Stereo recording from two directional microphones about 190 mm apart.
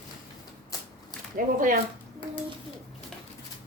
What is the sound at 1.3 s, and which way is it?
Speech, 45° right (ahead or behind).